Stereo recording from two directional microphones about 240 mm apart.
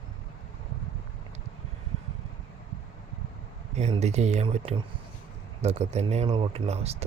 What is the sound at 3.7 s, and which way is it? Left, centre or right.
Speech, right.